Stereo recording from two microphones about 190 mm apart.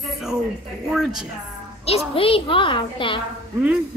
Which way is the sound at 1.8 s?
30° left (ahead or behind).